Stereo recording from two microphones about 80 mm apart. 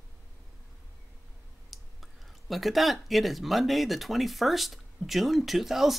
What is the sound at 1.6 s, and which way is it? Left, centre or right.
Speech, centre.